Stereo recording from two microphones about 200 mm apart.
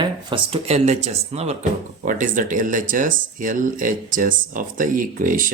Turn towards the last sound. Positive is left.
turn(degrees=-40)  # may be behind; listen again after turning